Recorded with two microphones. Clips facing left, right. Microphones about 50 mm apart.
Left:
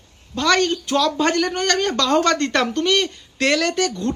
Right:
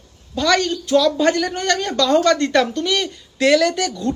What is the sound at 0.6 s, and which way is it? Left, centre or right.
Speech, left.